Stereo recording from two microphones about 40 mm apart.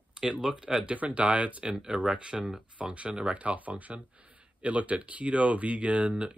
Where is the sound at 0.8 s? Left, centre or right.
Right.